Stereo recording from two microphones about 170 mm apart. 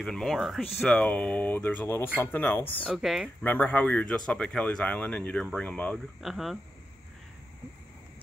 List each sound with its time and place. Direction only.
0.0 s speech: centre (ahead or behind)
2.9 s speech: centre (ahead or behind)
3.4 s speech: 10° left (ahead or behind)